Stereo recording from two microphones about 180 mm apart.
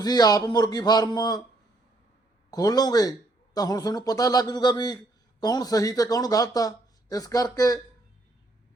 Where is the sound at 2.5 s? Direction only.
20° left (ahead or behind).